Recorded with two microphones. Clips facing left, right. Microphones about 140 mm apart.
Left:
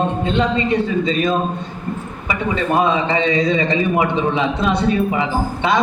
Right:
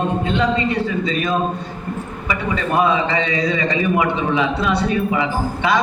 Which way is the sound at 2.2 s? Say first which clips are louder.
Left 2 dB; 25° left (ahead or behind).